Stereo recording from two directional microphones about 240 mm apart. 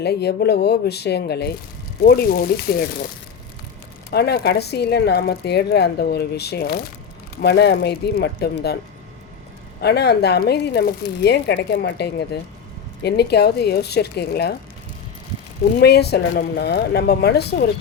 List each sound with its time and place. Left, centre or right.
0.0 s a woman's voice: left
4.1 s a woman's voice: left
9.8 s a woman's voice: left
15.8 s a woman's voice: left